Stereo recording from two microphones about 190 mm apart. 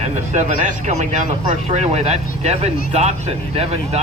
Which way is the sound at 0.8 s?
40° right (ahead or behind).